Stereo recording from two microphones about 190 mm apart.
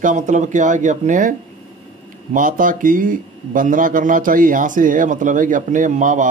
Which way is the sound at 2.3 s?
45° right (ahead or behind).